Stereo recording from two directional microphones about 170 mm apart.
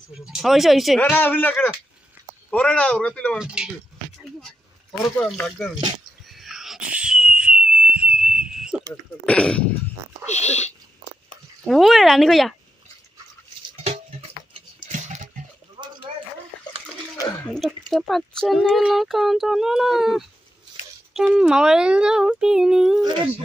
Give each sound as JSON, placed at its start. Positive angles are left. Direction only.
{"t": 0.3, "sound": "speech", "side_deg": 0}
{"t": 1.1, "sound": "a man's voice", "side_deg": 10}
{"t": 3.3, "sound": "speech", "side_deg": -5}
{"t": 4.2, "sound": "a sound", "side_deg": 0}
{"t": 5.2, "sound": "speech", "side_deg": 5}
{"t": 6.3, "sound": "wheeze", "side_deg": 0}
{"t": 9.2, "sound": "a man's voice", "side_deg": 5}
{"t": 10.2, "sound": "speech", "side_deg": 40}
{"t": 11.6, "sound": "speech", "side_deg": 0}
{"t": 13.8, "sound": "a sound", "side_deg": -35}
{"t": 15.8, "sound": "a sound", "side_deg": -25}
{"t": 17.5, "sound": "speech", "side_deg": 5}